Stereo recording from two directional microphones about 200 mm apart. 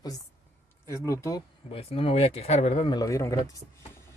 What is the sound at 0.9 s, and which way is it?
Speech, 15° left (ahead or behind).